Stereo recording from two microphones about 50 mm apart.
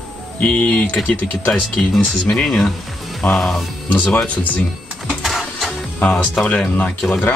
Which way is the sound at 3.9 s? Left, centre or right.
Left.